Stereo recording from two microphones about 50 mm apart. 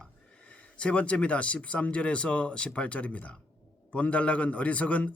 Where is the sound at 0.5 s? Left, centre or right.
Left.